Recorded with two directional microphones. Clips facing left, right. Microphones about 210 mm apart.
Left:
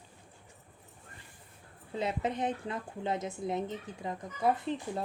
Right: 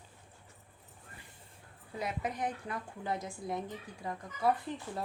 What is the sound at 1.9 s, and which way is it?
A woman's voice, 25° left (ahead or behind).